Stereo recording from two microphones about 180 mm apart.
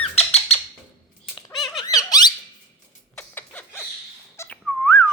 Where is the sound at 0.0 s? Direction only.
35° left (ahead or behind).